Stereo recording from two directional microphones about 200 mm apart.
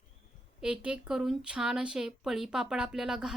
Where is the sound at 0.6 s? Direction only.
5° right (ahead or behind).